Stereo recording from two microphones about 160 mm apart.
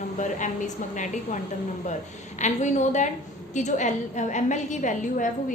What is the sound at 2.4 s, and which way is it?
A woman's voice, 50° left (ahead or behind).